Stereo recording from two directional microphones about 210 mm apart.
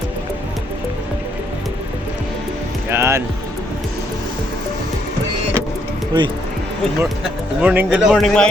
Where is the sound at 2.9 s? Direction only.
10° right (ahead or behind).